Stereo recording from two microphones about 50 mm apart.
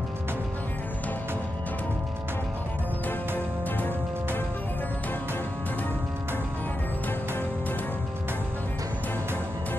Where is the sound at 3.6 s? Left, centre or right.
Left.